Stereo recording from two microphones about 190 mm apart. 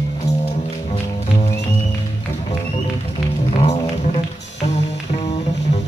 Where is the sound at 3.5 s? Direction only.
35° left (ahead or behind).